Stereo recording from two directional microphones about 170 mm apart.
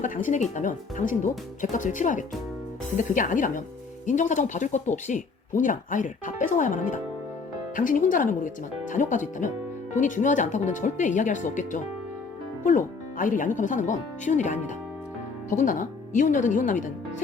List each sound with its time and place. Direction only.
0.0 s speech: 50° left (ahead or behind)